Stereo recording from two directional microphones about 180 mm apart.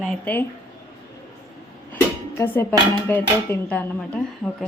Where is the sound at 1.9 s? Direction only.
10° left (ahead or behind).